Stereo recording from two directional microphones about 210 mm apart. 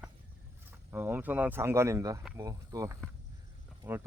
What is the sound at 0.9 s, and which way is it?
Speech, 10° right (ahead or behind).